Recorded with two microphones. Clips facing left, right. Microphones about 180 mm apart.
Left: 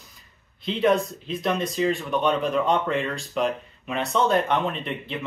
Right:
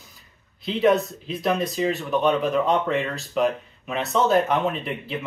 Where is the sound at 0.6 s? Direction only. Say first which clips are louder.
Right 2 dB; centre (ahead or behind).